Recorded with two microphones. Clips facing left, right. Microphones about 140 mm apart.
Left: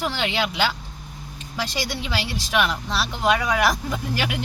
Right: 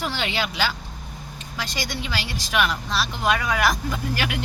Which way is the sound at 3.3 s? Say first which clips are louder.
Left 3 dB; 15° left (ahead or behind).